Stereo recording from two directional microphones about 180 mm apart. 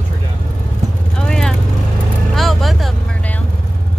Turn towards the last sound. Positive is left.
turn(degrees=0)  # may be behind; listen again after turning